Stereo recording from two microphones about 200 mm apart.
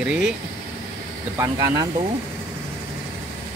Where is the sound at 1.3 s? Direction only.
15° right (ahead or behind).